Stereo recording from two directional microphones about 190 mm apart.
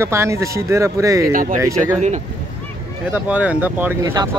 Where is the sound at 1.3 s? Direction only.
45° right (ahead or behind).